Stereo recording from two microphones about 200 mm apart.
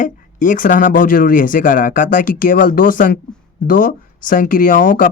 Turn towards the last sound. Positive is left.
turn(degrees=40)  # may be behind; listen again after turning